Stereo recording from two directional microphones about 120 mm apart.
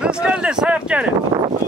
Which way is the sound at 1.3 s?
25° right (ahead or behind).